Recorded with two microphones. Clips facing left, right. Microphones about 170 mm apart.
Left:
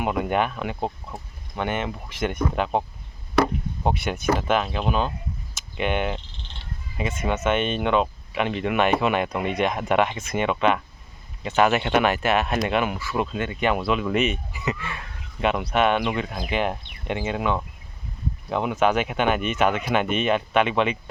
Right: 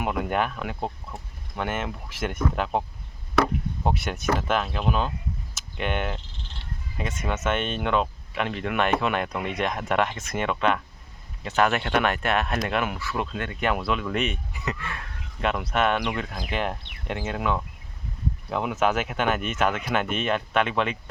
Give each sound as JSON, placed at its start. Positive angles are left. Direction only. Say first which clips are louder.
{"t": 0.0, "sound": "speech", "louder": "left 3 dB", "side_deg": 0}
{"t": 0.8, "sound": "speech", "louder": "left 3 dB", "side_deg": 20}
{"t": 1.5, "sound": "speech", "louder": "left 3 dB", "side_deg": 0}